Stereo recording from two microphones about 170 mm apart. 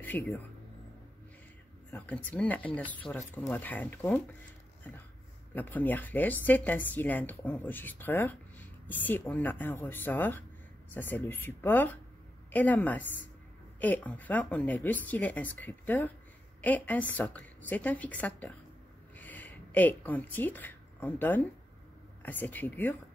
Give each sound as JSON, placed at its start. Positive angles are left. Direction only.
{"t": 0.0, "sound": "speech", "side_deg": 10}
{"t": 1.9, "sound": "speech", "side_deg": 10}